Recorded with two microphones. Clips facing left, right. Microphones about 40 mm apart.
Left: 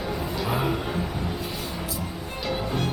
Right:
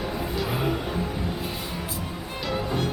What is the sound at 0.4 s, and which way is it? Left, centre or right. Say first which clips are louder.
Speech: left 3 dB; centre.